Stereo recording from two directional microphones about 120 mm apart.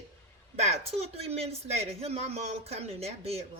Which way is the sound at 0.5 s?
65° right (ahead or behind).